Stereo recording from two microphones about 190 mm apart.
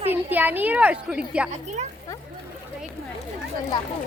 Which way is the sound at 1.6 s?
35° right (ahead or behind).